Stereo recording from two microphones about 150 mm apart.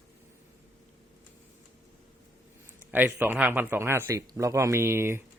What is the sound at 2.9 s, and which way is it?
Speech, 10° right (ahead or behind).